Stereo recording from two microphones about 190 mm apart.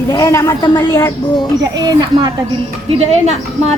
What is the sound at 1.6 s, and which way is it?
Speech, 20° right (ahead or behind).